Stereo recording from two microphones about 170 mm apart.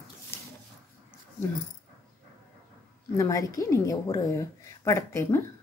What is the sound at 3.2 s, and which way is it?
A woman's voice, 20° left (ahead or behind).